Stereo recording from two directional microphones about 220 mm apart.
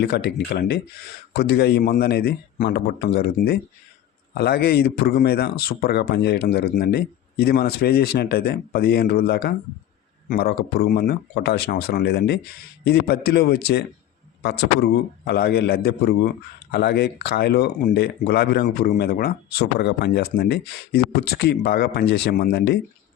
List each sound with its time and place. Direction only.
0.0 s speech: 50° left (ahead or behind)